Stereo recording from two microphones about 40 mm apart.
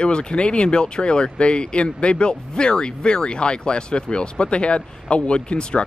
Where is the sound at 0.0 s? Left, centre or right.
Left.